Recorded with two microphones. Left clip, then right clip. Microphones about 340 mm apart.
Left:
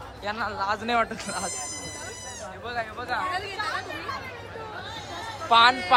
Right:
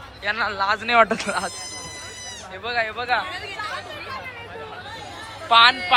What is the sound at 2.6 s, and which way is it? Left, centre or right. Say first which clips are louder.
Speech: right 8 dB; centre.